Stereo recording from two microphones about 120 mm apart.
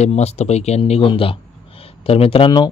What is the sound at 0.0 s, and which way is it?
A man's voice, 65° left (ahead or behind).